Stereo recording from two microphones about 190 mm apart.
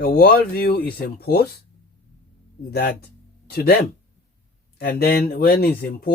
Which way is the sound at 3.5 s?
55° left (ahead or behind).